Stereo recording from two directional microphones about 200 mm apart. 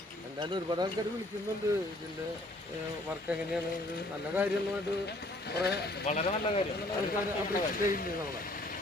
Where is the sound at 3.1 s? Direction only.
5° right (ahead or behind).